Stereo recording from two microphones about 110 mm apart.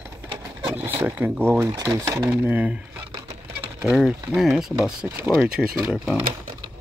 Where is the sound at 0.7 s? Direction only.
15° right (ahead or behind).